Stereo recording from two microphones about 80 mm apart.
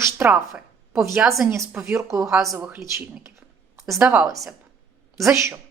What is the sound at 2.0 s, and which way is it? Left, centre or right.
Speech, right.